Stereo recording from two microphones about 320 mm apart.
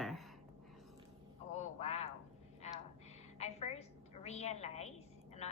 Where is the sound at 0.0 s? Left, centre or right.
Centre.